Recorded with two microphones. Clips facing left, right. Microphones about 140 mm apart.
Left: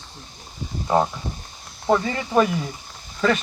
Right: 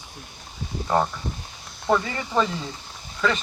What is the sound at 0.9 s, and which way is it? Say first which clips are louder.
Speech: left 2 dB; 20° left (ahead or behind).